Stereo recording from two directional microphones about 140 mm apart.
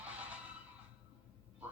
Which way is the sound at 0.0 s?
10° right (ahead or behind).